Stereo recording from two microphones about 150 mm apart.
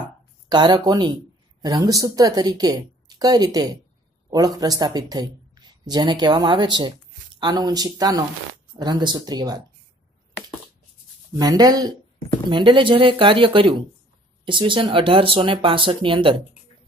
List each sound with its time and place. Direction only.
0.5 s speech: 30° right (ahead or behind)
11.3 s speech: 25° right (ahead or behind)